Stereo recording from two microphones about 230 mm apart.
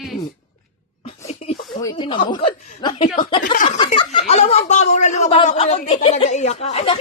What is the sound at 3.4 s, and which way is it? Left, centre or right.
Speech, left.